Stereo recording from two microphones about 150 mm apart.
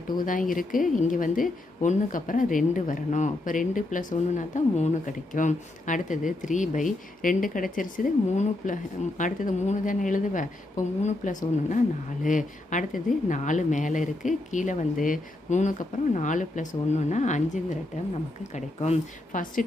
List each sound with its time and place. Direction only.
0.2 s a woman's voice: 65° left (ahead or behind)